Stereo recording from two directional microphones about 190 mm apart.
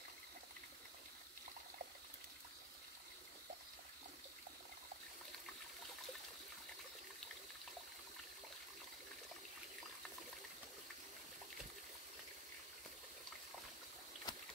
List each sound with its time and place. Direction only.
14.3 s boat: 20° left (ahead or behind)